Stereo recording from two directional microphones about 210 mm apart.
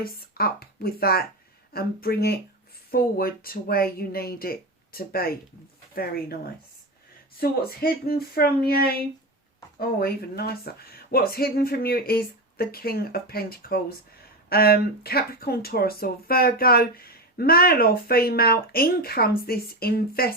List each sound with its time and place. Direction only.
0.0 s speech: 45° left (ahead or behind)